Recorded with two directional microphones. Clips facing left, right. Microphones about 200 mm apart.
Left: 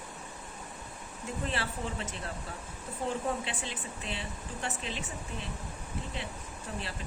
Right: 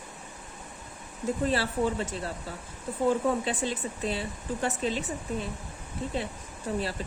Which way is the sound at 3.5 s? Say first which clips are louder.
Right 9 dB; 40° right (ahead or behind).